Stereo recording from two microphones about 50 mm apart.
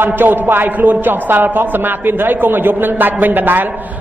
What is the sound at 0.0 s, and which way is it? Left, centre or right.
A man's voice, right.